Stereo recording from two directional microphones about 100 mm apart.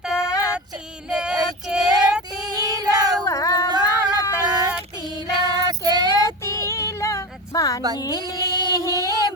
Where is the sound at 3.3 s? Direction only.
30° left (ahead or behind).